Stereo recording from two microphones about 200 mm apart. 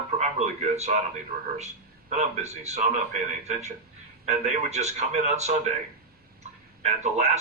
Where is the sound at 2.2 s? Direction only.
35° right (ahead or behind).